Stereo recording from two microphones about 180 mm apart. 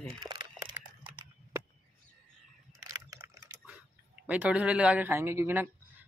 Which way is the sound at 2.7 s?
20° right (ahead or behind).